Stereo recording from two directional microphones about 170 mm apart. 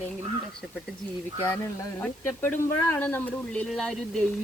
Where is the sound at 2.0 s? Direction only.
10° left (ahead or behind).